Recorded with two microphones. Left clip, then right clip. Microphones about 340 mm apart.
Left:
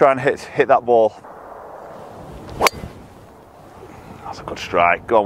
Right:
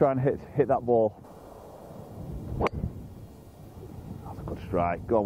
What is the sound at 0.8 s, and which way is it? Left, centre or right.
Speech, left.